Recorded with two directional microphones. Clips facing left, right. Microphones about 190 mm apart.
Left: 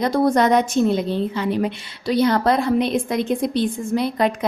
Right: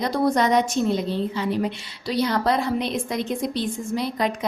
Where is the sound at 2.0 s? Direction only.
55° left (ahead or behind).